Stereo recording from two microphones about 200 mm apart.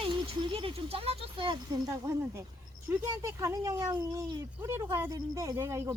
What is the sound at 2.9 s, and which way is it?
Speech, 15° right (ahead or behind).